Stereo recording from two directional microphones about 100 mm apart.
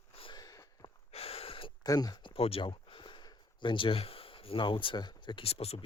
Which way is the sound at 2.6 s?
55° left (ahead or behind).